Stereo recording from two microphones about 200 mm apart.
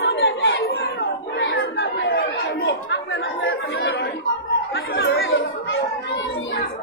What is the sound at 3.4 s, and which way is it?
Chatter, 70° left (ahead or behind).